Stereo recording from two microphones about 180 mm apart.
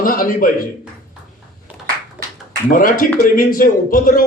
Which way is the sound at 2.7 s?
50° left (ahead or behind).